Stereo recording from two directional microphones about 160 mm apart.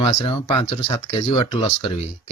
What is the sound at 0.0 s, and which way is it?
Speech, 35° left (ahead or behind).